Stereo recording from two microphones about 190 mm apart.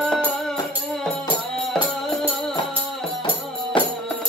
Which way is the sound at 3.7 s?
25° left (ahead or behind).